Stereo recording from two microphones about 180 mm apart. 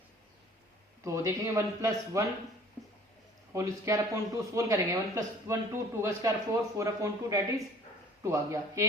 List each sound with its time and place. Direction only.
1.0 s speech: 15° right (ahead or behind)
3.5 s speech: 15° right (ahead or behind)